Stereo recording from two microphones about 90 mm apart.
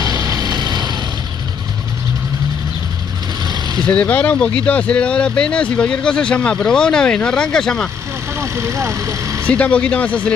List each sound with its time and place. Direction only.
0.0 s vehicle: 40° right (ahead or behind)
3.4 s vehicle: 45° right (ahead or behind)
3.8 s speech: 15° left (ahead or behind)
8.4 s speech: 30° right (ahead or behind)
9.5 s speech: 15° left (ahead or behind)